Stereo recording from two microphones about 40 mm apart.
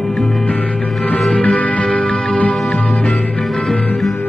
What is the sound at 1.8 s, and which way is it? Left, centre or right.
Music, left.